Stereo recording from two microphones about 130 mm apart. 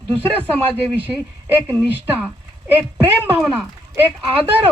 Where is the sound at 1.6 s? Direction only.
15° right (ahead or behind).